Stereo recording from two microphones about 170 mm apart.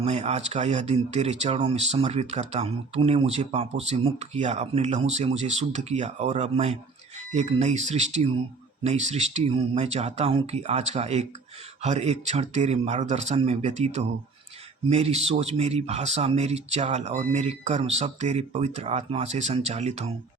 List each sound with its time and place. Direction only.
0.0 s speech: 40° right (ahead or behind)